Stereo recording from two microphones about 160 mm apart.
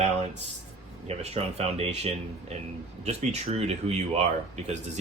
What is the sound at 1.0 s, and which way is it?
Speech, 40° right (ahead or behind).